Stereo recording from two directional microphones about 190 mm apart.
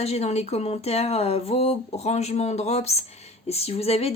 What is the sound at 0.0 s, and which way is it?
A woman's voice, 35° left (ahead or behind).